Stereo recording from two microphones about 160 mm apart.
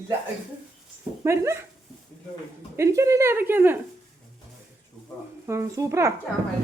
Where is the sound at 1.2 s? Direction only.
15° right (ahead or behind).